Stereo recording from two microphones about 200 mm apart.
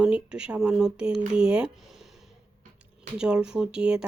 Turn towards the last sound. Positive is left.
turn(degrees=-5)  # may be behind; listen again after turning